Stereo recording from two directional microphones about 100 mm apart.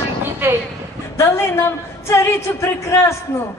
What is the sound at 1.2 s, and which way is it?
A woman's voice, 25° left (ahead or behind).